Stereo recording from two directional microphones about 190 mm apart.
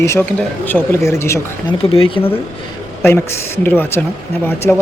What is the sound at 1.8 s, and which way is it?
Speech, 30° left (ahead or behind).